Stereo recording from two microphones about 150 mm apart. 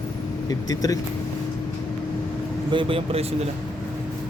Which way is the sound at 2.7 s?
35° right (ahead or behind).